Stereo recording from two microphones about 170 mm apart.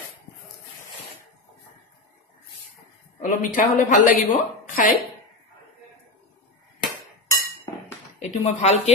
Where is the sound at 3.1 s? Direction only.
55° left (ahead or behind).